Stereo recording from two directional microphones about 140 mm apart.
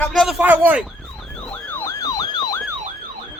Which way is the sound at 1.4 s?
15° left (ahead or behind).